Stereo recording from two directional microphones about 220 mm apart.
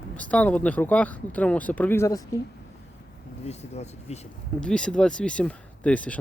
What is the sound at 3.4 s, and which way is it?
Speech, 30° left (ahead or behind).